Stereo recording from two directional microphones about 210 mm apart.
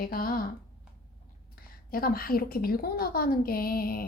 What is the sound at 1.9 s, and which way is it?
Speech, 45° left (ahead or behind).